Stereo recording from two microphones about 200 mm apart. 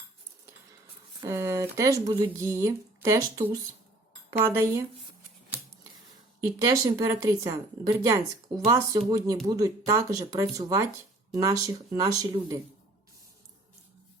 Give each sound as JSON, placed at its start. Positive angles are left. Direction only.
{"t": 1.3, "sound": "speech", "side_deg": -15}
{"t": 6.7, "sound": "speech", "side_deg": -15}